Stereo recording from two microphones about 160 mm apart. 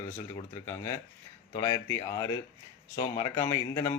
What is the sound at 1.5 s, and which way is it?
A man's voice, 20° left (ahead or behind).